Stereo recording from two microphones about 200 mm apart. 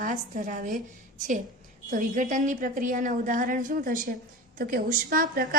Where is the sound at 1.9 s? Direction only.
40° right (ahead or behind).